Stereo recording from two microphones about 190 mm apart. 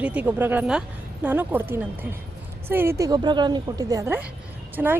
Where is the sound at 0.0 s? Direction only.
5° right (ahead or behind).